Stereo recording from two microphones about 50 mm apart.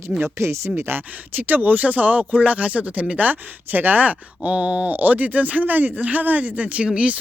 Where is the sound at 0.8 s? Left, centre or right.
Right.